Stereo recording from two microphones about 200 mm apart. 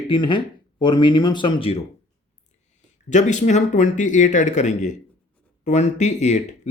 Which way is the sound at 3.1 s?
35° left (ahead or behind).